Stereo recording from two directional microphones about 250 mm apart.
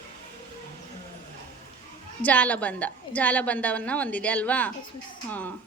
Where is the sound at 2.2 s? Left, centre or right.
Centre.